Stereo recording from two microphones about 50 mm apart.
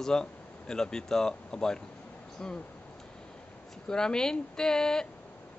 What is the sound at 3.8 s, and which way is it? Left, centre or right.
Speech, centre.